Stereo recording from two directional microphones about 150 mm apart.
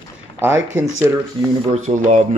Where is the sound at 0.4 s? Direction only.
15° right (ahead or behind).